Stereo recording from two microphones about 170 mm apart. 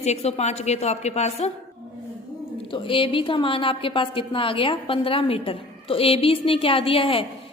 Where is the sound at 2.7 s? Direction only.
30° left (ahead or behind).